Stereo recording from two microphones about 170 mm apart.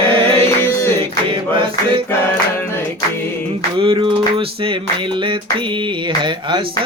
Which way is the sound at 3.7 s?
30° right (ahead or behind).